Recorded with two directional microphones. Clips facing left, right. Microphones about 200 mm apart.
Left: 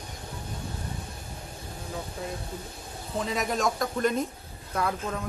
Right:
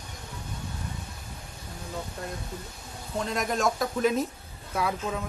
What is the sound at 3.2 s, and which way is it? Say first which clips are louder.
Speech: even; centre (ahead or behind).